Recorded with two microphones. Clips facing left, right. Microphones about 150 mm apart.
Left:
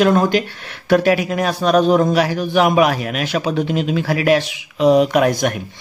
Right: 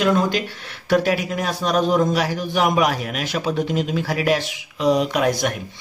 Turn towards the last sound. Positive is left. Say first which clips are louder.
# left 5 dB
turn(degrees=55)  # may be behind; listen again after turning